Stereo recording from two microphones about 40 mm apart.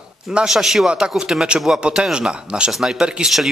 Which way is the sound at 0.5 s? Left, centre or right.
Centre.